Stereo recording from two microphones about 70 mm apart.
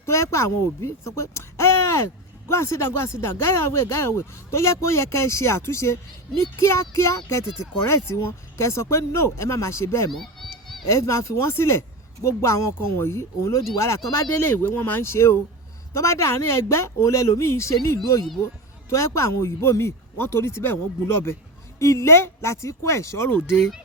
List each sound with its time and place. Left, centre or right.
0.0 s a woman's voice: left
10.1 s a sound: centre
10.8 s speech: left
21.8 s speech: left